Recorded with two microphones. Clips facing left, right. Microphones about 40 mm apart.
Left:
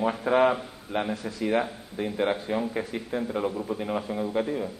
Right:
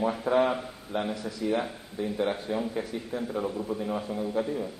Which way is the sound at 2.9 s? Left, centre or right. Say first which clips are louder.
Left 2 dB; left.